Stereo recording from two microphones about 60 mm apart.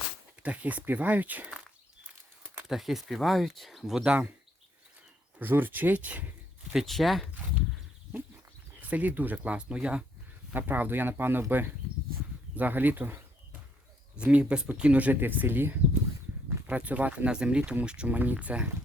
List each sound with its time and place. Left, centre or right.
0.4 s speech: right
2.6 s speech: centre
4.0 s speech: centre
5.4 s speech: right
6.7 s speech: centre
8.8 s speech: right
10.5 s speech: right
14.2 s speech: right
16.6 s speech: right